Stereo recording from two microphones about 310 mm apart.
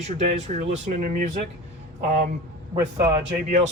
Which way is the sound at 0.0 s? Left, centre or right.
Right.